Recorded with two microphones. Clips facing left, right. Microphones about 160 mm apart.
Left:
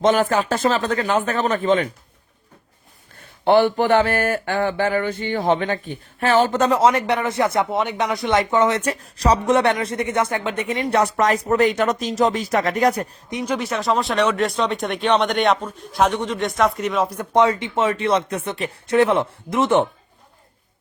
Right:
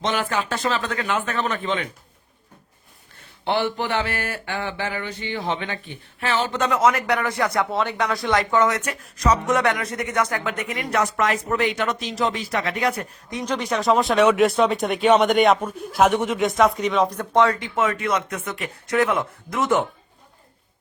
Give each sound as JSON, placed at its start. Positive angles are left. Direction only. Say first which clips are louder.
{"t": 0.0, "sound": "speech", "louder": "left 7 dB", "side_deg": 45}
{"t": 3.4, "sound": "speech", "louder": "left 8 dB", "side_deg": 50}
{"t": 13.4, "sound": "speech", "louder": "even", "side_deg": 5}